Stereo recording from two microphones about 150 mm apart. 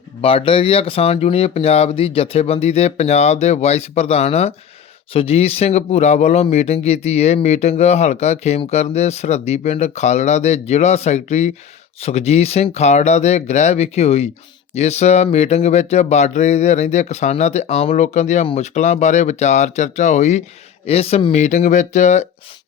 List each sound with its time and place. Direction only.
0.2 s speech: 40° left (ahead or behind)
21.3 s speech: 55° left (ahead or behind)